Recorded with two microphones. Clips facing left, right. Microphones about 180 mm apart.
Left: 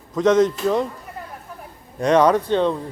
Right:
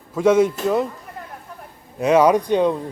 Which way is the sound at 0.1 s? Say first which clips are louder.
Right 1 dB; 10° right (ahead or behind).